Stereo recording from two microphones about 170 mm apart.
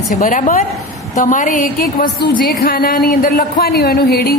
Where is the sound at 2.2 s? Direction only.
65° left (ahead or behind).